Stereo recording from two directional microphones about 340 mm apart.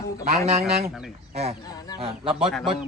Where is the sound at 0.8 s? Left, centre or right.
Centre.